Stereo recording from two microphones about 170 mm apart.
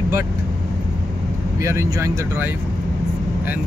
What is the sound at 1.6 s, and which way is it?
Speech, 15° right (ahead or behind).